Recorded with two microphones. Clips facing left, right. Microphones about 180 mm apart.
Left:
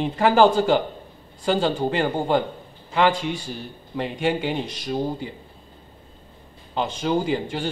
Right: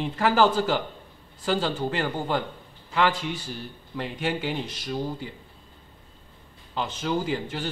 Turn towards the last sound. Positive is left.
turn(degrees=20)  # may be behind; listen again after turning